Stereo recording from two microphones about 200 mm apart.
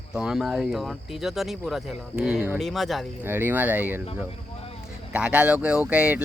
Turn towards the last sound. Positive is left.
turn(degrees=-5)  # may be behind; listen again after turning